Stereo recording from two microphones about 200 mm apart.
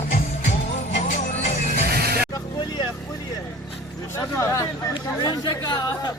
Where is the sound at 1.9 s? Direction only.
50° right (ahead or behind).